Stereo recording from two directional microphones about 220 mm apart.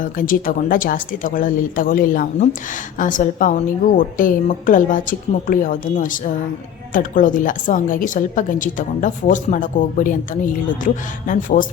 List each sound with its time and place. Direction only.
0.0 s a woman's voice: 40° left (ahead or behind)